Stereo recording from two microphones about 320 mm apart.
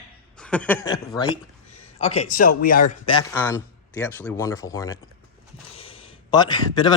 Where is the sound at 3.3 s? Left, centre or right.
Centre.